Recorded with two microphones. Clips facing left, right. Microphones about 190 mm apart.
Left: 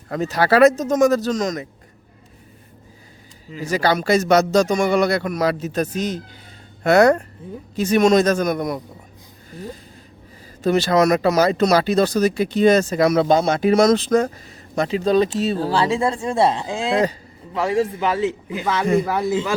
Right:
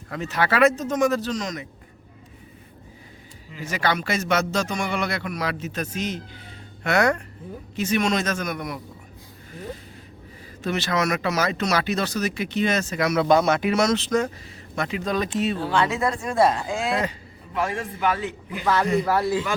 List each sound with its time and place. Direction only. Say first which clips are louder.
0.1 s speech: left 7 dB; 40° left (ahead or behind)
3.5 s speech: left 6 dB; 40° left (ahead or behind)
10.6 s speech: left 8 dB; 35° left (ahead or behind)